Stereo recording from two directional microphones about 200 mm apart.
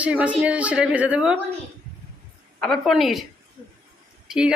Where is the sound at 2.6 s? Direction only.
Centre (ahead or behind).